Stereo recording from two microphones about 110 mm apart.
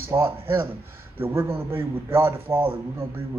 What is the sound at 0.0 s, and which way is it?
A man's voice, 20° right (ahead or behind).